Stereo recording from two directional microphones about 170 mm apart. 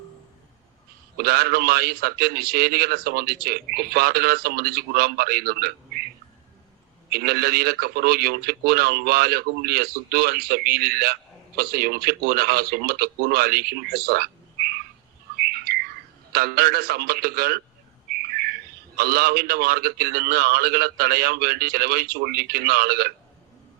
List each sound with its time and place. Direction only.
1.2 s a man's voice: 65° right (ahead or behind)
7.1 s a man's voice: 65° right (ahead or behind)
15.4 s bird: 65° right (ahead or behind)
16.3 s a man's voice: 65° right (ahead or behind)
18.1 s bird: 65° right (ahead or behind)
18.9 s a man's voice: 65° right (ahead or behind)